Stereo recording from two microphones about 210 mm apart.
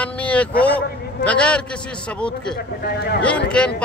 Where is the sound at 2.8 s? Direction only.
45° left (ahead or behind).